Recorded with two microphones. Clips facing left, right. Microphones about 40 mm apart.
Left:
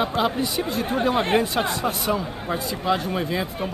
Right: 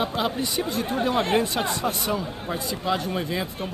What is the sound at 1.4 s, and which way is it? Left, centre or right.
Speech, centre.